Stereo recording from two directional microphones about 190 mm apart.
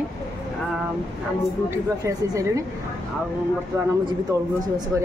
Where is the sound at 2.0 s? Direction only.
15° right (ahead or behind).